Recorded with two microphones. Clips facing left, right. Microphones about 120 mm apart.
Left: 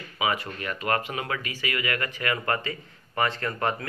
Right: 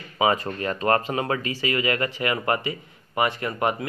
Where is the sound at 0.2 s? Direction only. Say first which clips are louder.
Right 6 dB; 35° right (ahead or behind).